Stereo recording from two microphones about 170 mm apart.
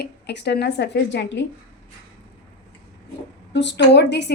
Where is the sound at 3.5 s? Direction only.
90° left.